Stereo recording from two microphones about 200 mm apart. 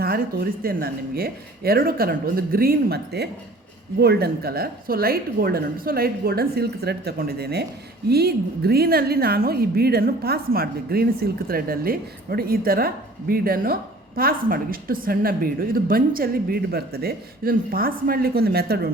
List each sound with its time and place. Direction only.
0.0 s a woman's voice: 50° right (ahead or behind)